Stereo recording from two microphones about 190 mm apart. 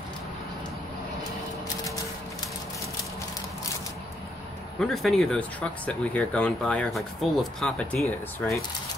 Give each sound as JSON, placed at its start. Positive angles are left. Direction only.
{"t": 4.7, "sound": "speech", "side_deg": 0}